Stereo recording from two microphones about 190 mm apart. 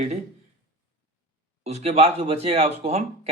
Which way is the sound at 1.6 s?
35° right (ahead or behind).